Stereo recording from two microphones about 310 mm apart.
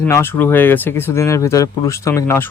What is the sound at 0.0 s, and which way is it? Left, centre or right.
Speech, centre.